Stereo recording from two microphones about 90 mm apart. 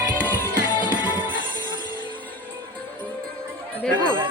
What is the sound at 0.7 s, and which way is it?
Music, 55° left (ahead or behind).